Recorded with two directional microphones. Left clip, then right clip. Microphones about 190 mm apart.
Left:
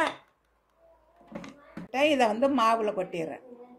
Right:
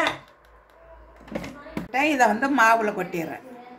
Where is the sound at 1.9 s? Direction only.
35° left (ahead or behind).